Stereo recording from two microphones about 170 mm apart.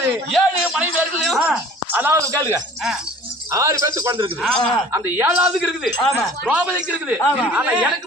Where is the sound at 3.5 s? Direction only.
20° right (ahead or behind).